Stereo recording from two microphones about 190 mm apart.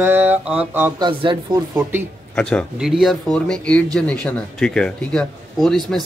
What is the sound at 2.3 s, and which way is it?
Speech, 5° left (ahead or behind).